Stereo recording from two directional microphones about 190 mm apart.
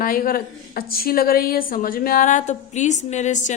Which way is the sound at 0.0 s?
50° left (ahead or behind).